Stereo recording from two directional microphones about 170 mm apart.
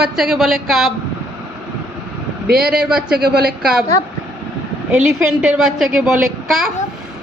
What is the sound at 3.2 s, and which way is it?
Speech, 65° right (ahead or behind).